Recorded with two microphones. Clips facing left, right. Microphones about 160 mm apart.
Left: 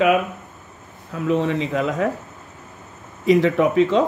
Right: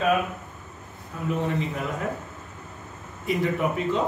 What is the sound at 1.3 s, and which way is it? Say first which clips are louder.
Speech: left 7 dB; 90° left.